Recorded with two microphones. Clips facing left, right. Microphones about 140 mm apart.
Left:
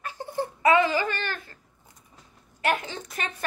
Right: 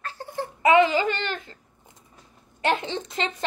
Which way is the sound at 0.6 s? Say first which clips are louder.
Right 3 dB; 20° right (ahead or behind).